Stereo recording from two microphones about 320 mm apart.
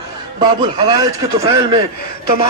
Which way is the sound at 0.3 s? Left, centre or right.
Centre.